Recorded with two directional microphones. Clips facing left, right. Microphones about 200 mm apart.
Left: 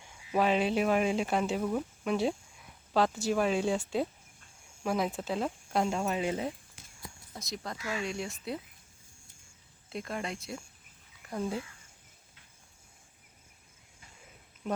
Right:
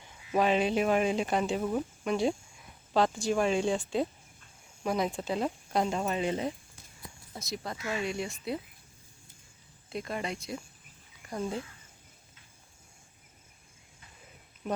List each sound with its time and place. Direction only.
0.3 s speech: centre (ahead or behind)
7.8 s speech: 25° right (ahead or behind)
8.0 s speech: 5° right (ahead or behind)
9.9 s speech: centre (ahead or behind)